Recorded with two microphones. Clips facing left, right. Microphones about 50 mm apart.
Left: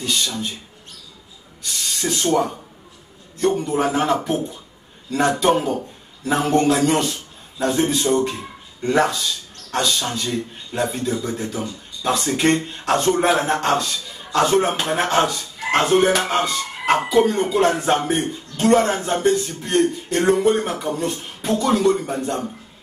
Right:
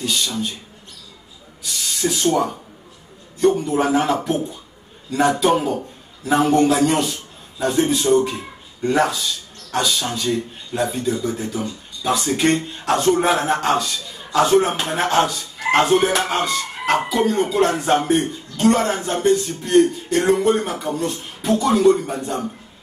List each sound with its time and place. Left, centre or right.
0.0 s speech: centre
1.6 s speech: centre
3.3 s a man's voice: centre